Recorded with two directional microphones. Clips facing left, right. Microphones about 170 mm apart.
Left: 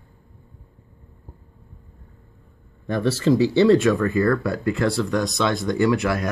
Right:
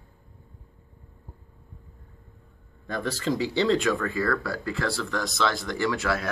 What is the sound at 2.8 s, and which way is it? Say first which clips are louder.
Speech: left 8 dB; 20° left (ahead or behind).